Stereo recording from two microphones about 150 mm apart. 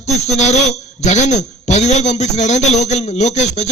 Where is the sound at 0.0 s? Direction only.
50° left (ahead or behind).